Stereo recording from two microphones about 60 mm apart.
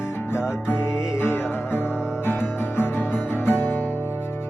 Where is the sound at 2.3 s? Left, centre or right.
Left.